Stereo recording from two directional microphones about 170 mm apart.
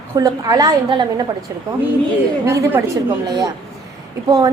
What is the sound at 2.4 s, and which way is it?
A woman's voice, 15° right (ahead or behind).